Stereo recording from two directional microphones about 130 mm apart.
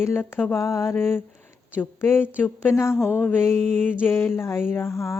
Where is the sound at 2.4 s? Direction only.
20° left (ahead or behind).